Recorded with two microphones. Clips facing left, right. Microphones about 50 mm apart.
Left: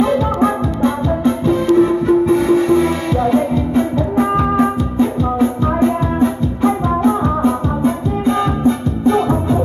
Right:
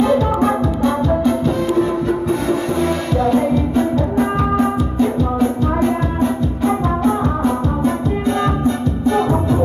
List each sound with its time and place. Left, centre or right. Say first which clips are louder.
0.4 s music: left 1 dB; left
6.6 s music: left 3 dB; left